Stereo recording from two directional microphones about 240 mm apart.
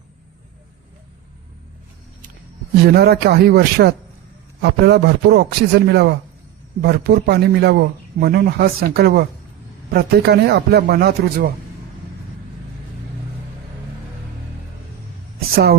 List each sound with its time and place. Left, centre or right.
2.8 s a man's voice: right